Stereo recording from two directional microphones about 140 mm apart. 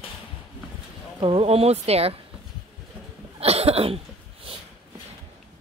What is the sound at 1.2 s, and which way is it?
Speech, 45° right (ahead or behind).